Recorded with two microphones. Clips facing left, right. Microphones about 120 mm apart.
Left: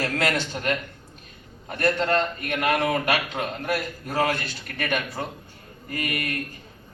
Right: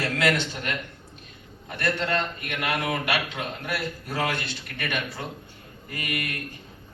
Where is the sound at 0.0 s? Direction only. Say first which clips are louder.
Even; 40° left (ahead or behind).